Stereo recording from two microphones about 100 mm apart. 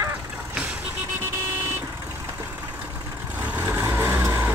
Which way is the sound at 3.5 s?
20° right (ahead or behind).